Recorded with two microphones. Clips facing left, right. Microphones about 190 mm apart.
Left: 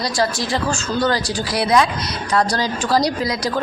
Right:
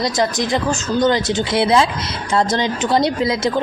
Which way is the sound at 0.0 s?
20° right (ahead or behind).